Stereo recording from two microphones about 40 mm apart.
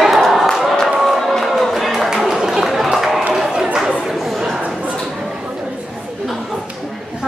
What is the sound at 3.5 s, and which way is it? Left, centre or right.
Chatter, centre.